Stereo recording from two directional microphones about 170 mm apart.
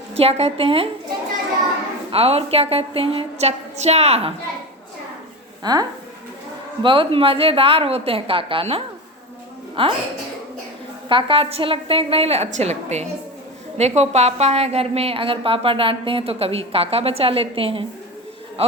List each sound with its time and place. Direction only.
0.1 s a woman's voice: 35° right (ahead or behind)
2.0 s a woman's voice: 35° right (ahead or behind)
5.6 s a woman's voice: 25° right (ahead or behind)
11.1 s a woman's voice: 35° right (ahead or behind)